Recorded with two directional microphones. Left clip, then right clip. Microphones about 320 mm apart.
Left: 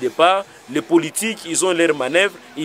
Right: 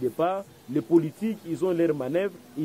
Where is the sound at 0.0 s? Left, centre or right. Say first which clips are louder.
Left 11 dB; centre.